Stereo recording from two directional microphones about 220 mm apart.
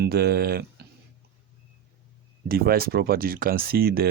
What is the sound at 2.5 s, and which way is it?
Speech, 45° right (ahead or behind).